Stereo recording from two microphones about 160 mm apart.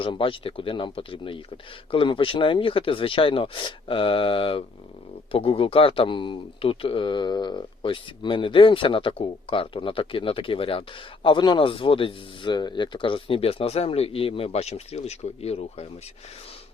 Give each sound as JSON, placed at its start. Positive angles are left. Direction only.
{"t": 0.0, "sound": "speech", "side_deg": 35}